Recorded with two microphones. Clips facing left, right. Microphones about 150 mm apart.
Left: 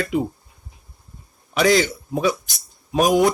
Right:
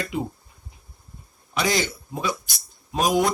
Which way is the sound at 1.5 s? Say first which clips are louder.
Left 7 dB; 70° left (ahead or behind).